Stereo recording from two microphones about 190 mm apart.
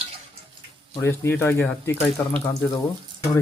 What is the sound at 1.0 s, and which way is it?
Speech, 10° left (ahead or behind).